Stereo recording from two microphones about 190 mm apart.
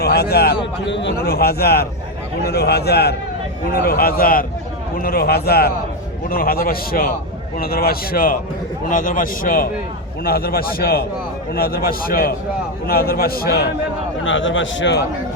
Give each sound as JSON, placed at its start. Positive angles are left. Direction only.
{"t": 0.0, "sound": "a man's voice", "side_deg": 55}
{"t": 0.9, "sound": "a man's voice", "side_deg": 70}
{"t": 14.3, "sound": "a man's voice", "side_deg": 90}